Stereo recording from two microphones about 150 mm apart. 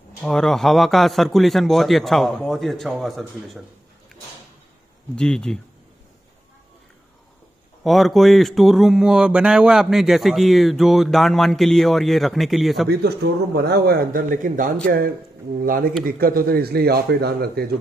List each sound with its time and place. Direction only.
0.2 s speech: 5° left (ahead or behind)
5.1 s speech: 5° left (ahead or behind)
7.8 s speech: centre (ahead or behind)
13.2 s speech: 90° right